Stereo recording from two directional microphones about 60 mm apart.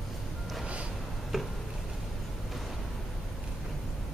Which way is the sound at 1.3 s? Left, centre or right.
Centre.